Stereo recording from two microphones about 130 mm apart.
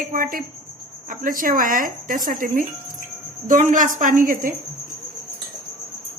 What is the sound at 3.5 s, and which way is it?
Speech, 80° right.